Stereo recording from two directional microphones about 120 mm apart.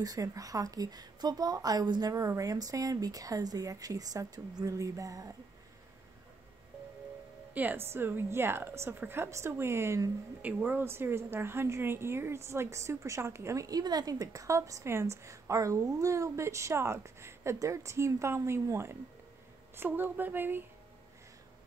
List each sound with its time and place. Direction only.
0.0 s a woman's voice: 30° right (ahead or behind)
7.5 s a woman's voice: 15° right (ahead or behind)